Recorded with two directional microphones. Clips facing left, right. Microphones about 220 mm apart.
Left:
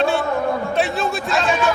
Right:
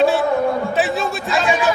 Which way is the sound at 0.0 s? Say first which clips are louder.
Right 4 dB; centre (ahead or behind).